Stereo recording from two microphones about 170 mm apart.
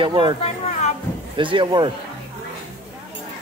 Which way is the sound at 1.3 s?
30° right (ahead or behind).